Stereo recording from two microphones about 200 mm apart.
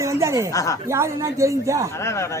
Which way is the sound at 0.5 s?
15° left (ahead or behind).